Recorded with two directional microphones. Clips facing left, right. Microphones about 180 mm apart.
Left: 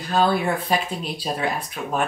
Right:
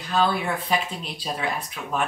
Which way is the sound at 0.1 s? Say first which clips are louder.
Left 3 dB; 40° left (ahead or behind).